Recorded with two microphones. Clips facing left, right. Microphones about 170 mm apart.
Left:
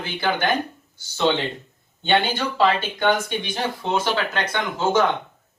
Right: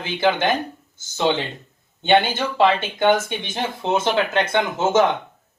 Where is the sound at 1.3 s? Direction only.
10° right (ahead or behind).